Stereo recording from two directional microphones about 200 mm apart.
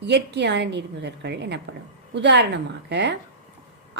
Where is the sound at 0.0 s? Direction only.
60° right (ahead or behind).